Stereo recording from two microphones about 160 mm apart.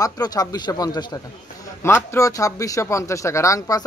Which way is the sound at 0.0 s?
25° left (ahead or behind).